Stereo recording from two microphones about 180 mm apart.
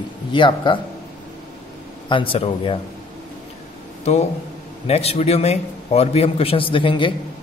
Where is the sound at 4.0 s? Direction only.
35° left (ahead or behind).